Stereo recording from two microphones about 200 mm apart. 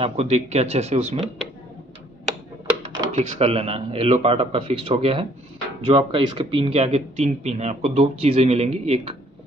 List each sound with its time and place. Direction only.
0.0 s speech: 30° right (ahead or behind)
3.2 s a man's voice: 30° right (ahead or behind)